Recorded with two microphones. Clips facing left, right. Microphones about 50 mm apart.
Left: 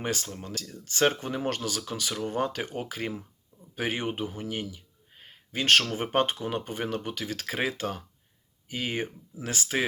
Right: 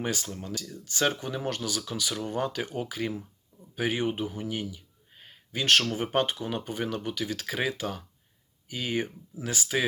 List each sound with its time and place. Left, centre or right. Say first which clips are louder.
0.0 s speech: even; left
5.2 s a sound: left 1 dB; left
5.9 s speech: left 1 dB; left